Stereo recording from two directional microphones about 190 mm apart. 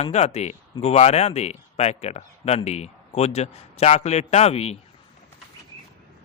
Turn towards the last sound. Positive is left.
turn(degrees=35)  # may be behind; listen again after turning